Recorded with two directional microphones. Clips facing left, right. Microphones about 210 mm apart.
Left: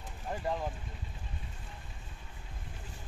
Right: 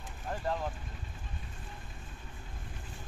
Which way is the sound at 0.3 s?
15° left (ahead or behind).